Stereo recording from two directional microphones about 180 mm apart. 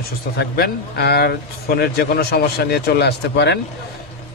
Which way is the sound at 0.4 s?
60° left (ahead or behind).